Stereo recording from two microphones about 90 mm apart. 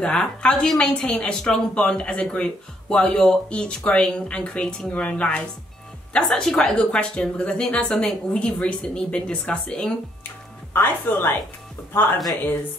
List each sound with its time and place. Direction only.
0.0 s speech: 10° left (ahead or behind)
10.7 s speech: 25° left (ahead or behind)